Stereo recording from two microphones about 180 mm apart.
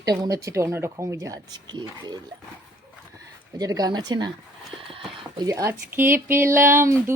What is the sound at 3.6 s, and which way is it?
Speech, 20° right (ahead or behind).